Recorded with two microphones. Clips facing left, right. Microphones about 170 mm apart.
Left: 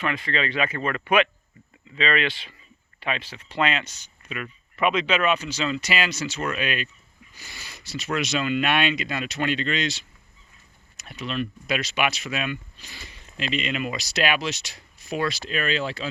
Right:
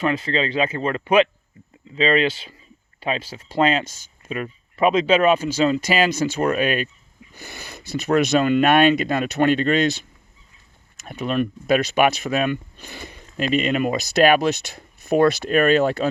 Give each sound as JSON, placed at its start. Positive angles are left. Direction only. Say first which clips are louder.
{"t": 0.0, "sound": "speech", "louder": "right 5 dB", "side_deg": -30}